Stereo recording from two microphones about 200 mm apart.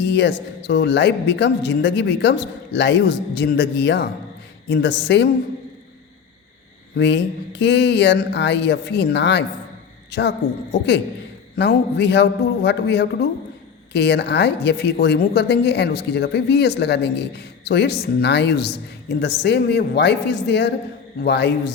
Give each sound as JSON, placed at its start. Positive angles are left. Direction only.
{"t": 0.0, "sound": "a woman's voice", "side_deg": 60}
{"t": 6.9, "sound": "a woman's voice", "side_deg": 60}